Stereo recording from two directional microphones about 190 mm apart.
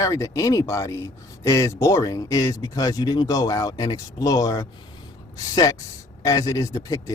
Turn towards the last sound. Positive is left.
turn(degrees=15)  # may be behind; listen again after turning